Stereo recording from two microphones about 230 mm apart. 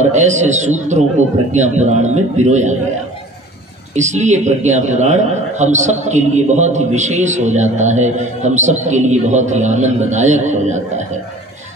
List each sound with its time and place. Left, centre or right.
0.0 s a man's voice: right
3.9 s a man's voice: right